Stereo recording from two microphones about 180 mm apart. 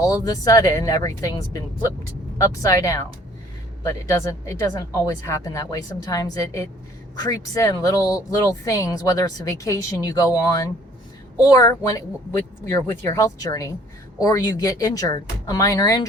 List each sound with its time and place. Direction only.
0.0 s speech: 20° left (ahead or behind)